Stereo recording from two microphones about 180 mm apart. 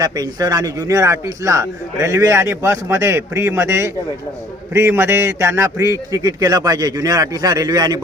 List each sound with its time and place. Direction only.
0.0 s a man's voice: 20° right (ahead or behind)